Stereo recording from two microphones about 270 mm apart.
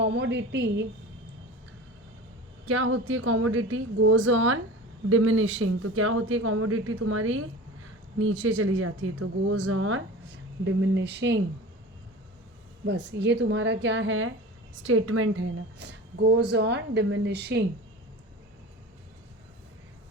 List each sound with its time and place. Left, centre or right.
0.0 s a woman's voice: right
2.6 s a woman's voice: right
12.9 s a woman's voice: right